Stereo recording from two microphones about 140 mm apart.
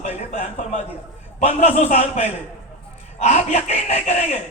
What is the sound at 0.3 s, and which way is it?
A man's voice, 55° left (ahead or behind).